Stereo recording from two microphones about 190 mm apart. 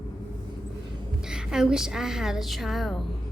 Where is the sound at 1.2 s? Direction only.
5° right (ahead or behind).